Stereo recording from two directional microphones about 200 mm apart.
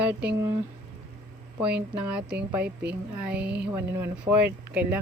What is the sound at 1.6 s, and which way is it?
Speech, 5° right (ahead or behind).